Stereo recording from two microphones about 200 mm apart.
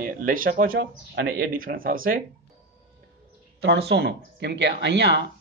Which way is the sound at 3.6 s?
55° right (ahead or behind).